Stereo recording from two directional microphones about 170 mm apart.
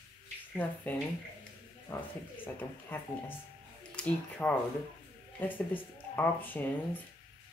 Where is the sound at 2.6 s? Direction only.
10° left (ahead or behind).